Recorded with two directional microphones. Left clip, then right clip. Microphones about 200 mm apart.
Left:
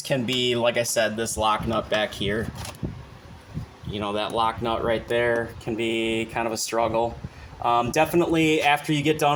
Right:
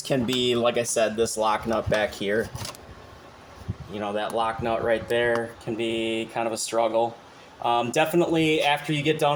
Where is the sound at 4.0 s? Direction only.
35° left (ahead or behind).